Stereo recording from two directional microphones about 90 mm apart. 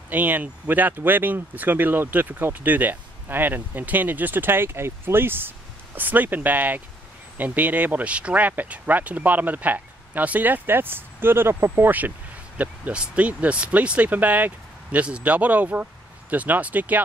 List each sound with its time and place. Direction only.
0.1 s speech: 20° right (ahead or behind)